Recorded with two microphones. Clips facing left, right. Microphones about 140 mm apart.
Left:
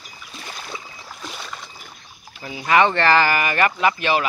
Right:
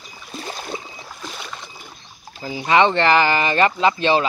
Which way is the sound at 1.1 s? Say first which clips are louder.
Even; centre (ahead or behind).